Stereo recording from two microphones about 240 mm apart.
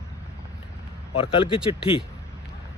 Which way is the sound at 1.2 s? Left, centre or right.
Left.